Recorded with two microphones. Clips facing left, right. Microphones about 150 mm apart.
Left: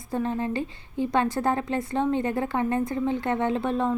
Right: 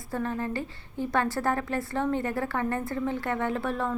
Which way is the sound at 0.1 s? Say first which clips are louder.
Left 3 dB; 20° left (ahead or behind).